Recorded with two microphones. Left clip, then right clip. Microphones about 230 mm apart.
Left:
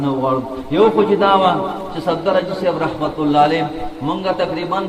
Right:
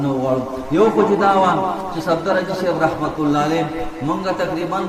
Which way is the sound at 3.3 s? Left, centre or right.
Left.